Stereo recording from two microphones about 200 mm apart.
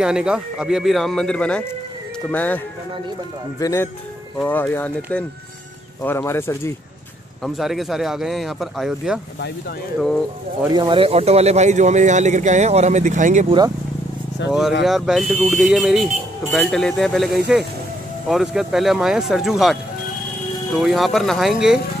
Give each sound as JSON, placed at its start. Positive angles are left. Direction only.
{"t": 0.0, "sound": "speech", "side_deg": -5}
{"t": 7.4, "sound": "speech", "side_deg": 0}
{"t": 10.7, "sound": "speech", "side_deg": -25}
{"t": 14.4, "sound": "speech", "side_deg": 65}
{"t": 14.9, "sound": "speech", "side_deg": 0}
{"t": 20.8, "sound": "speech", "side_deg": 0}